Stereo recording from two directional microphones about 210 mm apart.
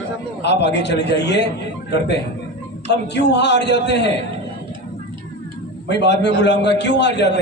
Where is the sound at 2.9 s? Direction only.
55° left (ahead or behind).